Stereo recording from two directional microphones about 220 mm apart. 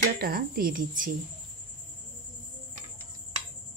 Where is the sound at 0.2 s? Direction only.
40° right (ahead or behind).